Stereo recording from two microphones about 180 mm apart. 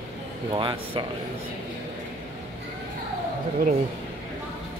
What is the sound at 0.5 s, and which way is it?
Speech, 25° right (ahead or behind).